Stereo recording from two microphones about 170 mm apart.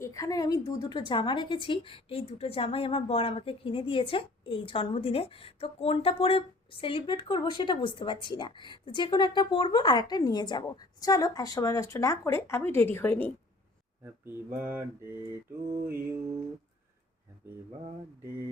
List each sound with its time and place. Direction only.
0.0 s a woman's voice: 20° left (ahead or behind)
14.3 s mantra: 10° right (ahead or behind)